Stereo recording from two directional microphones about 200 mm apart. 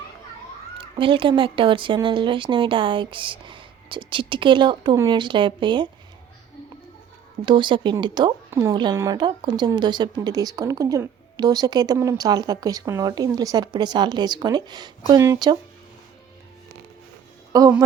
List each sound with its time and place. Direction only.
0.8 s a woman's voice: 25° right (ahead or behind)
7.4 s a woman's voice: 25° right (ahead or behind)
17.5 s speech: 15° right (ahead or behind)